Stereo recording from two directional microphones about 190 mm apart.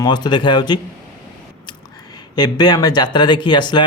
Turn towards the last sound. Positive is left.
turn(degrees=25)  # may be behind; listen again after turning